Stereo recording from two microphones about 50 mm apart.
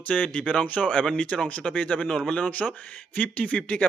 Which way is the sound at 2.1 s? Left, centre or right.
Centre.